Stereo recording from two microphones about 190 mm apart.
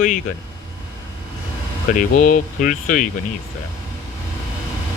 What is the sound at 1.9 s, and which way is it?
Speech, 45° left (ahead or behind).